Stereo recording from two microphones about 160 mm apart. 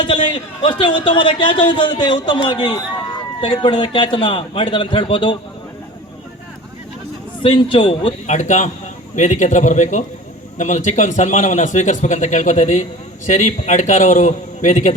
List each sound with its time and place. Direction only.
0.3 s a man's voice: 30° left (ahead or behind)
7.4 s a man's voice: 30° left (ahead or behind)
8.3 s a man's voice: 50° left (ahead or behind)